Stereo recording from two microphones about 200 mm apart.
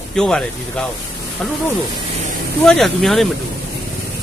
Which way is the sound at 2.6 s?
5° left (ahead or behind).